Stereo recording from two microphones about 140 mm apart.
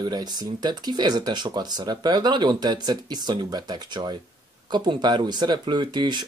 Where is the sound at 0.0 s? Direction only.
30° right (ahead or behind).